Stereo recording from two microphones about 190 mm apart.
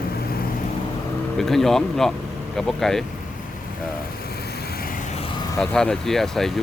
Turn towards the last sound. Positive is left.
turn(degrees=0)  # may be behind; listen again after turning